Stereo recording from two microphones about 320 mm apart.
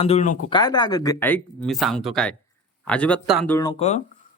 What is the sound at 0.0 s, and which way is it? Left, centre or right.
Speech, centre.